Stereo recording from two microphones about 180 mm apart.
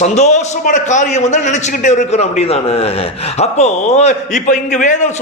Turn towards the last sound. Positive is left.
turn(degrees=45)  # may be behind; listen again after turning